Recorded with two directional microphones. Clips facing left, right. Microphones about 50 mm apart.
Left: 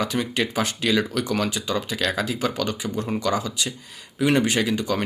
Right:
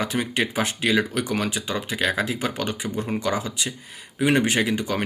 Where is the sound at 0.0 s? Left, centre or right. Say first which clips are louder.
Even; right.